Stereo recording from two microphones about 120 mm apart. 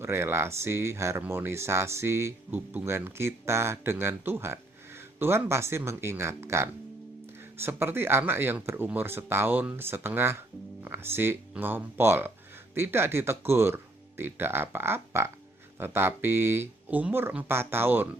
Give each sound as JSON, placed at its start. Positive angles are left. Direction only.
{"t": 0.0, "sound": "speech", "side_deg": -20}